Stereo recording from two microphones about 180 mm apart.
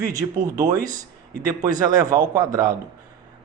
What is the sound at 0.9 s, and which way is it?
A man's voice, 20° right (ahead or behind).